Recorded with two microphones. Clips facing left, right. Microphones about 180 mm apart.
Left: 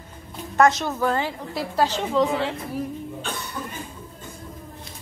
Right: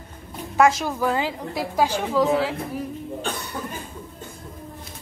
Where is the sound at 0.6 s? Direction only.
10° right (ahead or behind).